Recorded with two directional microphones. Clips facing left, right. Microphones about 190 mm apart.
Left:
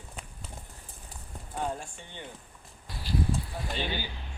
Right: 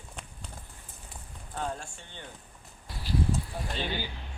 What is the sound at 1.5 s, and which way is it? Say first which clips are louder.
Speech: left 2 dB; 15° left (ahead or behind).